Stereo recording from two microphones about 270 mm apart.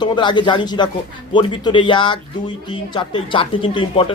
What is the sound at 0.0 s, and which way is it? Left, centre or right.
Speech, centre.